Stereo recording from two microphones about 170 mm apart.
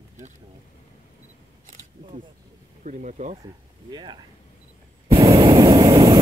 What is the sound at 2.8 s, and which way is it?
Speech, 45° right (ahead or behind).